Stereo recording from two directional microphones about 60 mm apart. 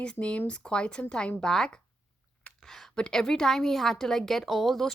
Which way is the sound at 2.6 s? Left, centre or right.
Centre.